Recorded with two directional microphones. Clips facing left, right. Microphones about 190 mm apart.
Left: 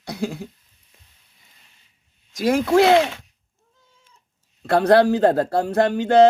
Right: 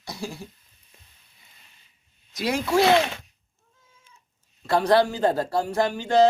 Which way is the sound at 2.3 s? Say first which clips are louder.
Left 6 dB; 50° left (ahead or behind).